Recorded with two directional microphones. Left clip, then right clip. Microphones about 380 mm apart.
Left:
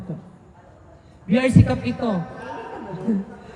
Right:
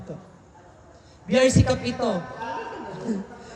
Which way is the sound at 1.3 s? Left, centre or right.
Centre.